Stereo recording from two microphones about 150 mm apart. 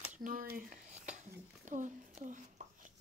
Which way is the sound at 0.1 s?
60° right (ahead or behind).